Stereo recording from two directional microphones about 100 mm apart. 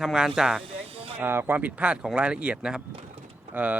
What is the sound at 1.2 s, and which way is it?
Speech, 20° right (ahead or behind).